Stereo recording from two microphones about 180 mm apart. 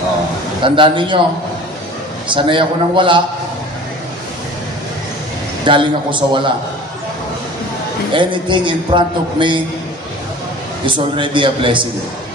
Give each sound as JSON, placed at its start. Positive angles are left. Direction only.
{"t": 0.6, "sound": "a man's voice", "side_deg": -25}
{"t": 2.2, "sound": "a man's voice", "side_deg": -25}
{"t": 5.7, "sound": "a man's voice", "side_deg": -25}
{"t": 8.1, "sound": "a man's voice", "side_deg": -25}
{"t": 10.9, "sound": "a man's voice", "side_deg": -25}